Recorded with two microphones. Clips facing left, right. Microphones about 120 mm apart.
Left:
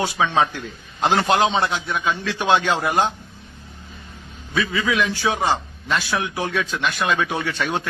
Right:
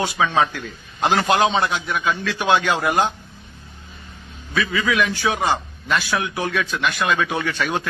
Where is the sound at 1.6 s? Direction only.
25° left (ahead or behind).